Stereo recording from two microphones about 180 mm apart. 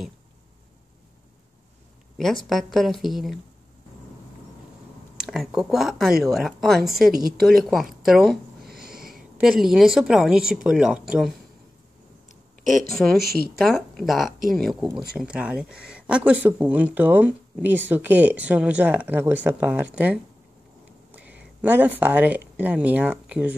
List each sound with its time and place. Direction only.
2.4 s speech: centre (ahead or behind)
5.2 s speech: centre (ahead or behind)
12.9 s speech: centre (ahead or behind)
21.1 s a sound: 5° right (ahead or behind)
22.6 s speech: 10° right (ahead or behind)